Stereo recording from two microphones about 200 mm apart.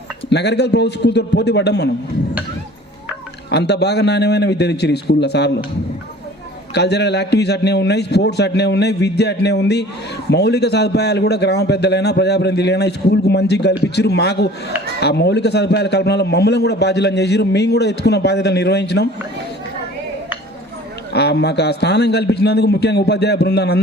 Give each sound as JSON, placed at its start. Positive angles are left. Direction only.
{"t": 0.3, "sound": "a man's voice", "side_deg": 55}
{"t": 3.5, "sound": "a man's voice", "side_deg": 55}
{"t": 6.7, "sound": "a man's voice", "side_deg": 55}
{"t": 21.1, "sound": "a man's voice", "side_deg": 55}